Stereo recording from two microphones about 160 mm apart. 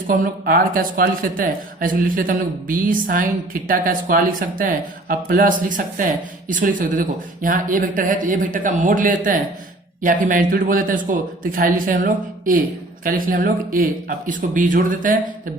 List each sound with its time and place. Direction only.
0.1 s speech: 60° right (ahead or behind)